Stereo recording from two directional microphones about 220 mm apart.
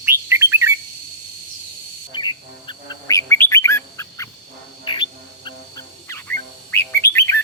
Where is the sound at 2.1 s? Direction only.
20° left (ahead or behind).